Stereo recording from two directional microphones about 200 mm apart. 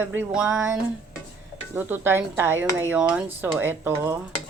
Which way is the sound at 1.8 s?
10° right (ahead or behind).